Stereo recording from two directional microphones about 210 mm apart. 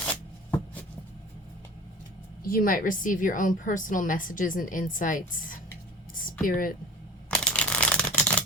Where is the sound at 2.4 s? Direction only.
45° left (ahead or behind).